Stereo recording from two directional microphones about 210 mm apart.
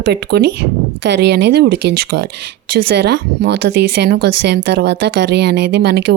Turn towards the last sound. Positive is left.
turn(degrees=-50)  # may be behind; listen again after turning